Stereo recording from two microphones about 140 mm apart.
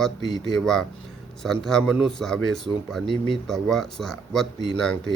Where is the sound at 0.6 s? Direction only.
5° left (ahead or behind).